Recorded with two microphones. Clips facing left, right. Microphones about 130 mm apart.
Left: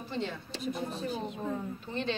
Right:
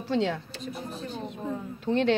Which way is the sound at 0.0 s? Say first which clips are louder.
Right 9 dB; 85° right.